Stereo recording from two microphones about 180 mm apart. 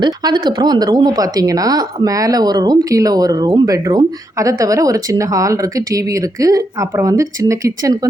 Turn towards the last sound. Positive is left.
turn(degrees=-15)  # may be behind; listen again after turning